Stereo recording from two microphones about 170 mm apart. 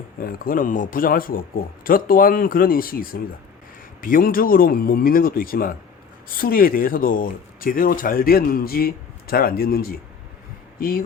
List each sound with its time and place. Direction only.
0.2 s speech: 55° left (ahead or behind)